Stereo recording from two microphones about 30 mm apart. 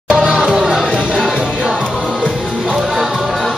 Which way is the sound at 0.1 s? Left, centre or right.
Centre.